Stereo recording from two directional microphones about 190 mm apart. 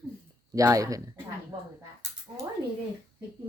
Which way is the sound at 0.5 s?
15° right (ahead or behind).